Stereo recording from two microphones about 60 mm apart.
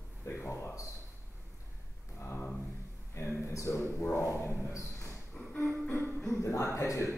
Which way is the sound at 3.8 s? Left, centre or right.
Left.